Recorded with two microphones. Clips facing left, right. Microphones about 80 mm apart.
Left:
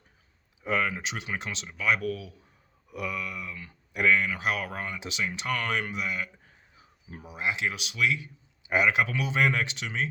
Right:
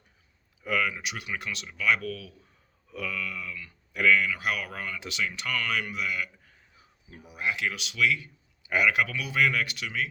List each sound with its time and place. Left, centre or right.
0.6 s speech: left